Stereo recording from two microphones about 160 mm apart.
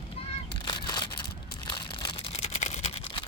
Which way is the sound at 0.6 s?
25° left (ahead or behind).